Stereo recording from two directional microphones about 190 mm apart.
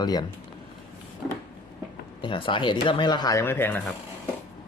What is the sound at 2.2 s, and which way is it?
Speech, 25° left (ahead or behind).